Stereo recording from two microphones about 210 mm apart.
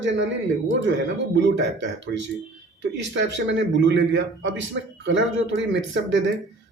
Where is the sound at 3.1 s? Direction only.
60° right (ahead or behind).